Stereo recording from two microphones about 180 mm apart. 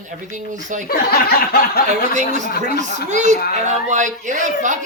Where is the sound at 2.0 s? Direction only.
40° right (ahead or behind).